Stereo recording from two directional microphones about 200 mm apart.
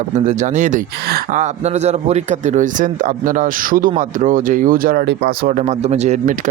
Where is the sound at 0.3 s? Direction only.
35° right (ahead or behind).